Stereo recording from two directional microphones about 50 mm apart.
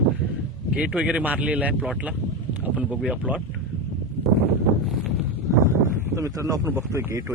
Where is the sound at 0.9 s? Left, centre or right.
Right.